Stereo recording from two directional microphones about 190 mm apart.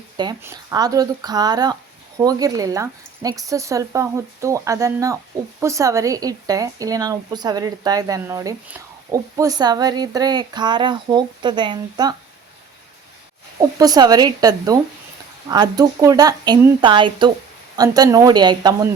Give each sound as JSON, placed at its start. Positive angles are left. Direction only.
{"t": 0.4, "sound": "speech", "side_deg": -20}
{"t": 13.6, "sound": "speech", "side_deg": -20}